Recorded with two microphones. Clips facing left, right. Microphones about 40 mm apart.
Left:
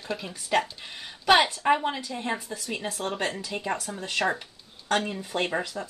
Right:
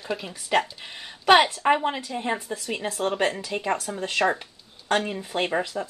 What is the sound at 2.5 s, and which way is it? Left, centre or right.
Speech, right.